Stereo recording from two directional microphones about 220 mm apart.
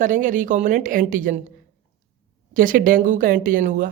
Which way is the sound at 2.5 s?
40° right (ahead or behind).